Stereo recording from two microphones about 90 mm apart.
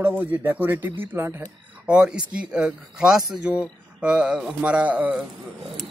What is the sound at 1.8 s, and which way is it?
Speech, 10° right (ahead or behind).